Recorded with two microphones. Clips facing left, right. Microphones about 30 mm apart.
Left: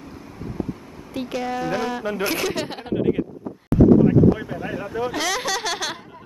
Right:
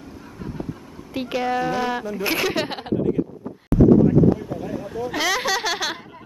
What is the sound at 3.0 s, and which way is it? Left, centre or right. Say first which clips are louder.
Speech: left 2 dB; left.